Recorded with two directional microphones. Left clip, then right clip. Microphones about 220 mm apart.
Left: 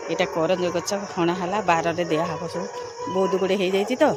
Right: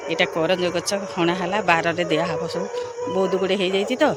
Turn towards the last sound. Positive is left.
turn(degrees=0)  # may be behind; listen again after turning